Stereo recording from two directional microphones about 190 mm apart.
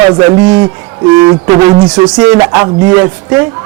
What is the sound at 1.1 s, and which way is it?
Speech, 25° right (ahead or behind).